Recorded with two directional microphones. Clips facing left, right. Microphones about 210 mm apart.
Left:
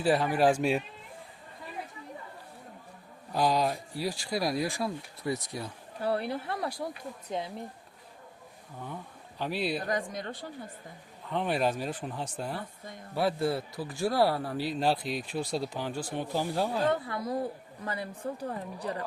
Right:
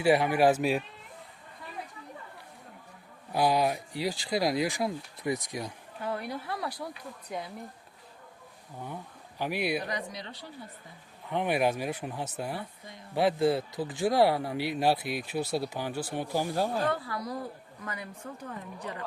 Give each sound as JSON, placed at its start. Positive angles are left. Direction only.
{"t": 0.0, "sound": "speech", "side_deg": -15}
{"t": 3.3, "sound": "speech", "side_deg": -10}
{"t": 6.0, "sound": "speech", "side_deg": 35}
{"t": 9.4, "sound": "speech", "side_deg": -10}
{"t": 9.8, "sound": "speech", "side_deg": 50}
{"t": 11.3, "sound": "speech", "side_deg": -15}
{"t": 13.1, "sound": "speech", "side_deg": -20}
{"t": 16.9, "sound": "a woman's voice", "side_deg": 25}